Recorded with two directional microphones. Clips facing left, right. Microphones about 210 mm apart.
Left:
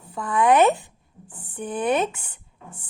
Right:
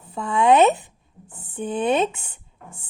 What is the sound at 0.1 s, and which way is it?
A woman's voice, 25° right (ahead or behind).